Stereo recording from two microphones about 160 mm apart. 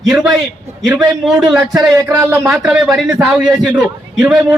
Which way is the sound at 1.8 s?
20° right (ahead or behind).